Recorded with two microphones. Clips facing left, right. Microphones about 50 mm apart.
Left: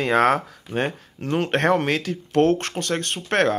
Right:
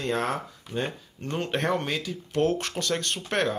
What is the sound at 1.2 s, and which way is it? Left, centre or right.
Speech, left.